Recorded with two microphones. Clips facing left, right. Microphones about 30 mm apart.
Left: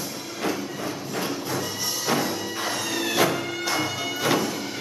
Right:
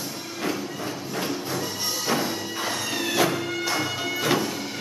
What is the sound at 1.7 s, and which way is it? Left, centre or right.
Music, centre.